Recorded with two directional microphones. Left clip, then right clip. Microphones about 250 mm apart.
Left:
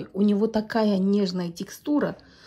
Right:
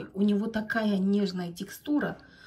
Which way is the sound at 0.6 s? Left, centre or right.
Left.